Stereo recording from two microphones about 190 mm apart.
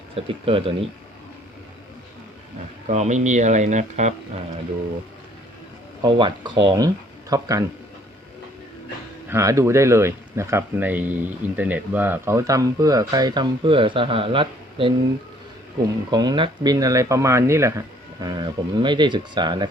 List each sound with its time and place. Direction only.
0.3 s speech: 30° right (ahead or behind)
2.8 s speech: 40° right (ahead or behind)
6.0 s speech: 25° right (ahead or behind)
9.3 s speech: 15° right (ahead or behind)
16.1 s speech: 25° right (ahead or behind)